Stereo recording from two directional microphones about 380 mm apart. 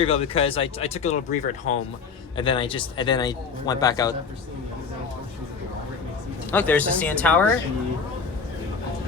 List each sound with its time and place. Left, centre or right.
0.0 s speech: centre
6.5 s speech: centre